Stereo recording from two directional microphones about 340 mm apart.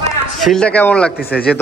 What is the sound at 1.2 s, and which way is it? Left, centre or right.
Speech, left.